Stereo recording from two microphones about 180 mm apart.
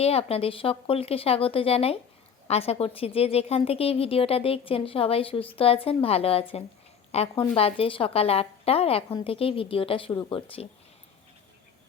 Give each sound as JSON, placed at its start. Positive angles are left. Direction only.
{"t": 0.0, "sound": "a woman's voice", "side_deg": 35}